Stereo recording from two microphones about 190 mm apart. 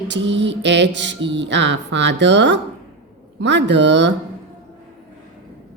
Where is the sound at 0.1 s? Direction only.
70° right (ahead or behind).